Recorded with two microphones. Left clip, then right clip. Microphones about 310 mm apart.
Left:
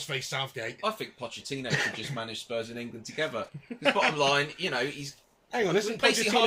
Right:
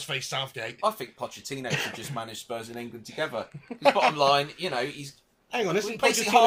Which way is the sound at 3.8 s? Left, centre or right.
Centre.